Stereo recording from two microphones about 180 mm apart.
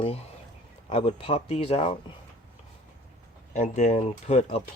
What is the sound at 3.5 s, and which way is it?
Speech, 40° left (ahead or behind).